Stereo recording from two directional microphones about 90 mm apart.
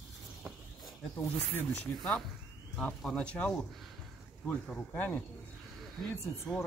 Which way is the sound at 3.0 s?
10° left (ahead or behind).